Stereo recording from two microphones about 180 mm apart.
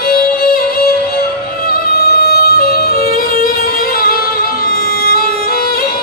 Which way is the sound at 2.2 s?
60° left (ahead or behind).